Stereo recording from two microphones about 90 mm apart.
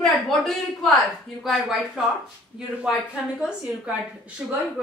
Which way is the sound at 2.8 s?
10° right (ahead or behind).